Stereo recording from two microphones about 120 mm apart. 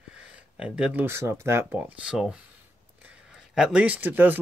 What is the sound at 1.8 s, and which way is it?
Speech, 10° right (ahead or behind).